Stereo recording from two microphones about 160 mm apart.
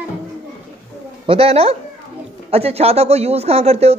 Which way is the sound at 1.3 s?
40° right (ahead or behind).